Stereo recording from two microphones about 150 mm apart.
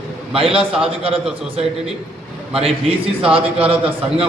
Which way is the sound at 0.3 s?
40° right (ahead or behind).